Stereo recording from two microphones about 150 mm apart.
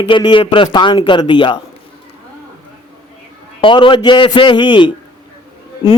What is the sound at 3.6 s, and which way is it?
A man's voice, 35° left (ahead or behind).